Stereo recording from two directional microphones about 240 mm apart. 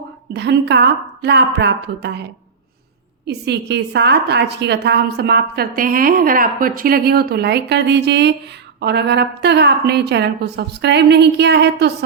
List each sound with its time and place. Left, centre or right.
0.3 s a woman's voice: right
3.2 s a woman's voice: right